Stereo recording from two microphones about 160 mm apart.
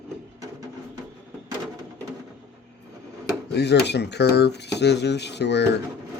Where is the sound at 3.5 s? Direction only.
90° left.